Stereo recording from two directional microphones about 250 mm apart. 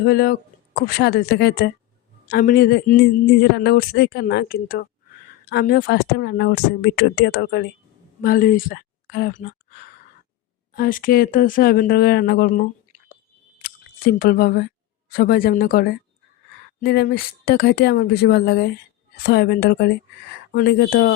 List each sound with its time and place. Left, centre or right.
0.0 s speech: left
13.6 s chewing: left
15.1 s speech: left